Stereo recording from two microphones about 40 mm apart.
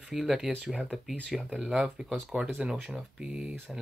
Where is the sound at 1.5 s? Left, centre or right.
Centre.